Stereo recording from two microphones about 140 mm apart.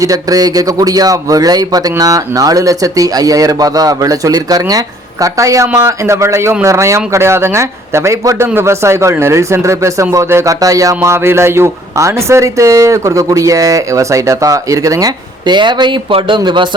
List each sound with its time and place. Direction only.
0.0 s speech: 25° right (ahead or behind)